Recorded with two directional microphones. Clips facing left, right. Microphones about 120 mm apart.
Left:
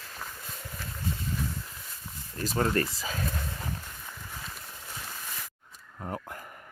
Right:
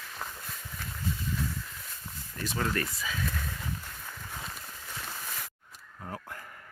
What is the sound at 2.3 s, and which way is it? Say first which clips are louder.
Speech: left 4 dB; 35° left (ahead or behind).